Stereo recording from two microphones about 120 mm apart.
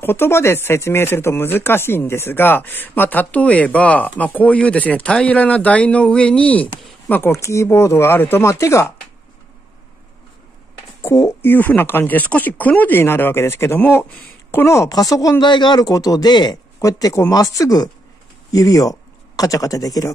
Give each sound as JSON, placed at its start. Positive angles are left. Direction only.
{"t": 0.0, "sound": "speech", "side_deg": 20}
{"t": 11.0, "sound": "speech", "side_deg": 20}
{"t": 15.4, "sound": "speech", "side_deg": 40}